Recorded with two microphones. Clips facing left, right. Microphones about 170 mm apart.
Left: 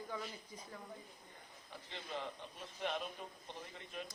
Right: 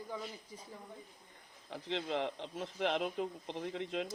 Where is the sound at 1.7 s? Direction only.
90° right.